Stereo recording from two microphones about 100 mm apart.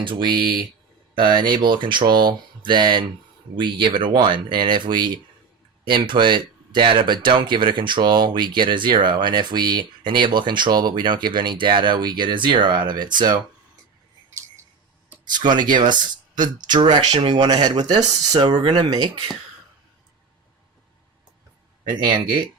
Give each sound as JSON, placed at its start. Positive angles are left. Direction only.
{"t": 0.0, "sound": "speech", "side_deg": -55}
{"t": 15.2, "sound": "speech", "side_deg": -45}
{"t": 18.3, "sound": "speech", "side_deg": -50}